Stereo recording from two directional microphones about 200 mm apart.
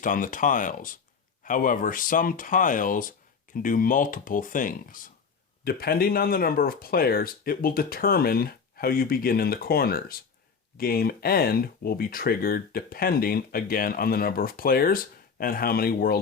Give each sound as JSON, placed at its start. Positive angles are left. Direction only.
{"t": 0.0, "sound": "speech", "side_deg": 40}